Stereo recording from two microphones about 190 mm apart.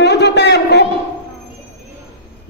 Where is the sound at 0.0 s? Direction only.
65° left (ahead or behind).